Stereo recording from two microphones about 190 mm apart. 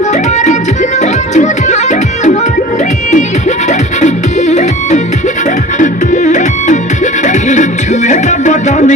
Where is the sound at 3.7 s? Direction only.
40° left (ahead or behind).